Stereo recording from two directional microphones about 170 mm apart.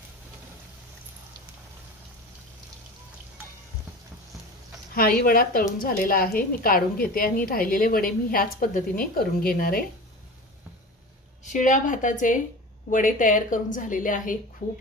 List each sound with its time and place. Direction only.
4.9 s a woman's voice: 55° left (ahead or behind)
11.4 s a woman's voice: 50° left (ahead or behind)